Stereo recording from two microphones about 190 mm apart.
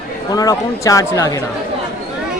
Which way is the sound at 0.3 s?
20° left (ahead or behind).